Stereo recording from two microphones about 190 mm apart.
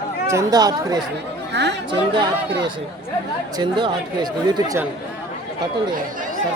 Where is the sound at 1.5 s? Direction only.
65° right (ahead or behind).